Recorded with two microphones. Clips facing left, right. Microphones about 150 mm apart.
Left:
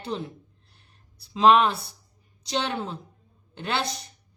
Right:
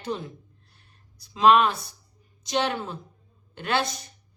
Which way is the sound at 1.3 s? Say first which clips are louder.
Even; 25° left (ahead or behind).